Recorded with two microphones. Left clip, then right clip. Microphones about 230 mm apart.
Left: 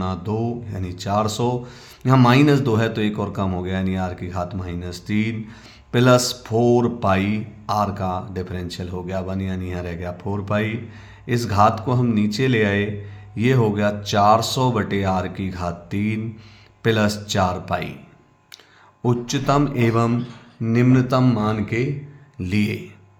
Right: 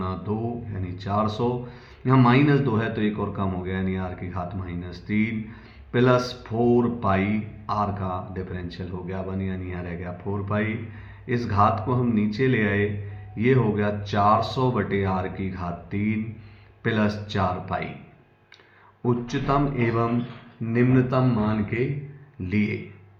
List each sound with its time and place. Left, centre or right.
0.0 s speech: left
19.0 s speech: left